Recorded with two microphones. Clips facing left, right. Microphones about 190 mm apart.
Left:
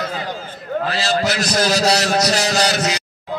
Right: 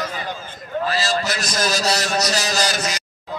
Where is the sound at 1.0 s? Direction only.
65° left (ahead or behind).